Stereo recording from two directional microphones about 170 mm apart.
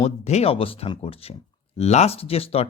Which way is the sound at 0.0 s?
40° left (ahead or behind).